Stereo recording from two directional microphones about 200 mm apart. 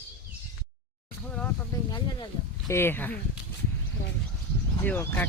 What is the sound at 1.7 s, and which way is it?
Speech, 20° left (ahead or behind).